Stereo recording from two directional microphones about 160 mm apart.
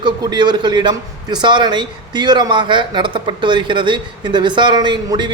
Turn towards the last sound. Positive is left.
turn(degrees=-25)  # may be behind; listen again after turning